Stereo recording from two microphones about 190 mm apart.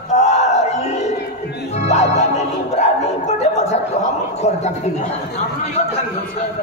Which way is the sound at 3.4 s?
35° left (ahead or behind).